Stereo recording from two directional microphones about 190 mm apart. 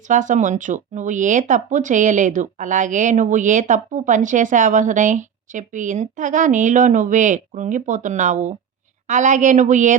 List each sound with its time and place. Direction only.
0.1 s speech: 40° right (ahead or behind)